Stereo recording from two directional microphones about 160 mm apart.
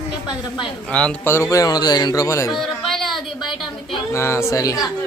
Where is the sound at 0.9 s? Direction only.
5° left (ahead or behind).